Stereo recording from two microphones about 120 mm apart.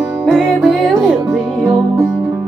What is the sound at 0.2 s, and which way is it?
Music, 5° right (ahead or behind).